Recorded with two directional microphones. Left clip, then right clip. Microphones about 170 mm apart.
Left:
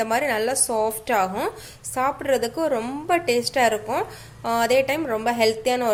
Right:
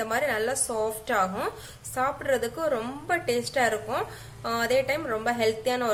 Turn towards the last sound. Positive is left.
turn(degrees=35)  # may be behind; listen again after turning